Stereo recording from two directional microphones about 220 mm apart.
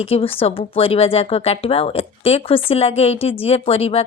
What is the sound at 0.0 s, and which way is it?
Speech, 25° left (ahead or behind).